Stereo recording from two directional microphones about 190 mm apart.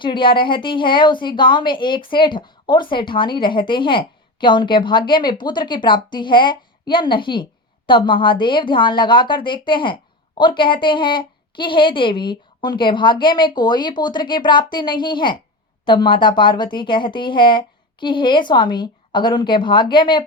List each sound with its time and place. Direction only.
0.0 s a woman's voice: 25° left (ahead or behind)